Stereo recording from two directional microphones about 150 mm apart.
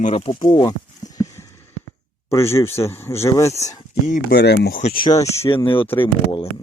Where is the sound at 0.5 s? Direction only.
25° left (ahead or behind).